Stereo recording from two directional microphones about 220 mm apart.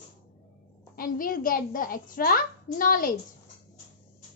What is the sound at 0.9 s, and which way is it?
A woman's voice, 40° left (ahead or behind).